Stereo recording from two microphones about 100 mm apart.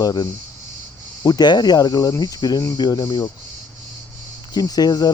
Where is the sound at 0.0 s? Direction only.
45° left (ahead or behind).